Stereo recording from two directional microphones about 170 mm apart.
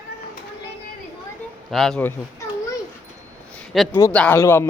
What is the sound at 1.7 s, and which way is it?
Speech, centre (ahead or behind).